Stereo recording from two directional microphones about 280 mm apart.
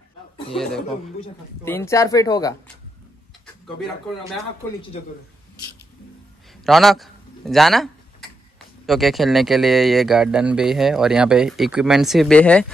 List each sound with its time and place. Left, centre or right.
0.6 s speech: centre
6.6 s a sound: centre
8.8 s speech: centre